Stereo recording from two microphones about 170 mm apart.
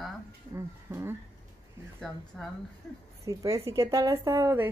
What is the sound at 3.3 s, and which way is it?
Speech, 20° right (ahead or behind).